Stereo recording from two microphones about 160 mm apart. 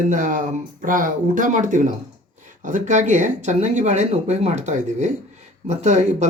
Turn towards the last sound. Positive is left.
turn(degrees=-45)  # may be behind; listen again after turning